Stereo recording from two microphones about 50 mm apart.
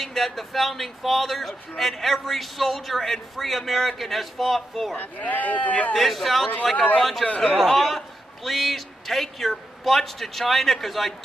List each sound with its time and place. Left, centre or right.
0.0 s a man's voice: centre
4.9 s speech: left
5.9 s a man's voice: centre
7.2 s a man's voice: left
7.5 s a man's voice: centre